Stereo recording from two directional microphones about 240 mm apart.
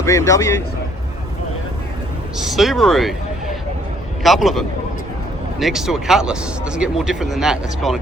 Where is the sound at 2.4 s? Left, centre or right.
Centre.